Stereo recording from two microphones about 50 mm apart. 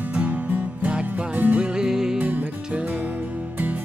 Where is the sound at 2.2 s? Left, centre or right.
Right.